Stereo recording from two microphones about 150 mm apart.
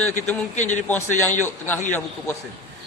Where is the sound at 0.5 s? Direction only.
50° left (ahead or behind).